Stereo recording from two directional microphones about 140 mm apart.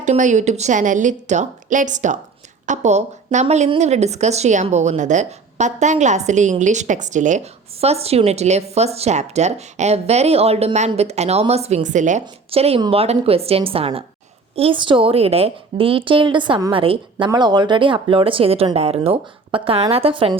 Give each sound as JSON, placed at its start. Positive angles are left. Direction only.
{"t": 0.0, "sound": "a woman's voice", "side_deg": -60}
{"t": 12.2, "sound": "a woman's voice", "side_deg": -45}
{"t": 16.7, "sound": "speech", "side_deg": -40}